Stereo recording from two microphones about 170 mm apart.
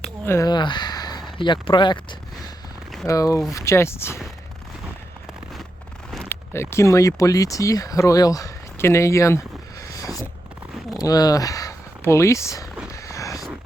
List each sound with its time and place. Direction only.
0.3 s speech: 20° left (ahead or behind)
6.2 s speech: 15° left (ahead or behind)
10.9 s speech: 20° left (ahead or behind)
12.9 s a sound: 15° left (ahead or behind)